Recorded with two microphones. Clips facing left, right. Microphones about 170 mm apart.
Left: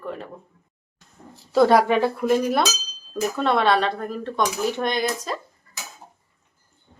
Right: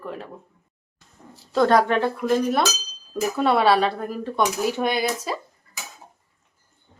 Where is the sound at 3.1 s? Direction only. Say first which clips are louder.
Right 1 dB; 10° right (ahead or behind).